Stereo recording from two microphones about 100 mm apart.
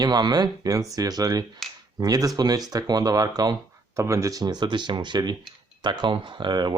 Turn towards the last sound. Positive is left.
turn(degrees=-50)  # may be behind; listen again after turning